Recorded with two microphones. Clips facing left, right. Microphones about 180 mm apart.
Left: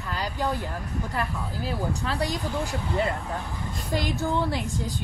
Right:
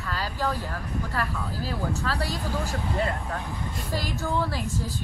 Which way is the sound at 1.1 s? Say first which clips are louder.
Even; 20° left (ahead or behind).